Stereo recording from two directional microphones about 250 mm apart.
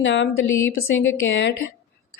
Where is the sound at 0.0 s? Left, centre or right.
Left.